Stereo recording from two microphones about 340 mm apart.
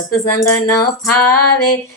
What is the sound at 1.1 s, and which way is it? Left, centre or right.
Female singing, right.